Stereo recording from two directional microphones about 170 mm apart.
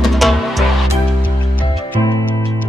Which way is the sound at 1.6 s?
20° left (ahead or behind).